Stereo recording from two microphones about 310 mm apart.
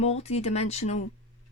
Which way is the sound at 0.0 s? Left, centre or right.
Centre.